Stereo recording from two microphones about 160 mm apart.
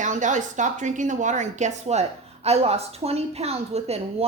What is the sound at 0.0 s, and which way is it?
A woman's voice, 50° right (ahead or behind).